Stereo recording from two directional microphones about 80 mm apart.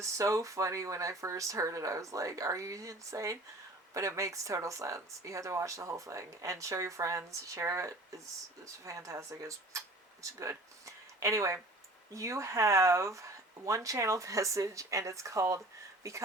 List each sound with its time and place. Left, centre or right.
0.0 s speech: right